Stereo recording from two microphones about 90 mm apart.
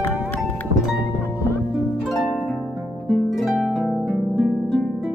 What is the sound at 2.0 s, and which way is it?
Harp, centre (ahead or behind).